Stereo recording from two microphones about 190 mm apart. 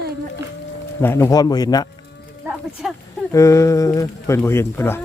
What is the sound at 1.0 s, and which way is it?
Speech, 10° left (ahead or behind).